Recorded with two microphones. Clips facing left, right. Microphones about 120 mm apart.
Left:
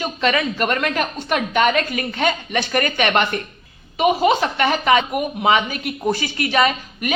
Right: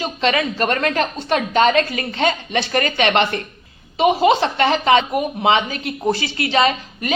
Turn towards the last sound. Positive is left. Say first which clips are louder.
# right 1 dB
turn(degrees=-30)  # may be behind; listen again after turning